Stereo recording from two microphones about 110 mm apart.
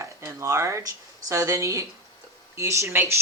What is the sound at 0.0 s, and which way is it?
A woman's voice, 25° right (ahead or behind).